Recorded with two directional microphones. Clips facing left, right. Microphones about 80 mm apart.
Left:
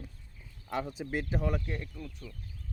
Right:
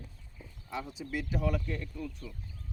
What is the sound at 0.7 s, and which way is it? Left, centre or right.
Speech, left.